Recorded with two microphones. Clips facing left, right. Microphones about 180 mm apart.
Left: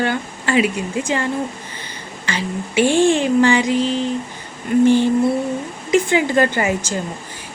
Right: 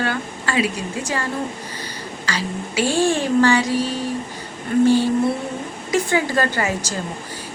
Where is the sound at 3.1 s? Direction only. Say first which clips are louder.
Left 2 dB; 20° left (ahead or behind).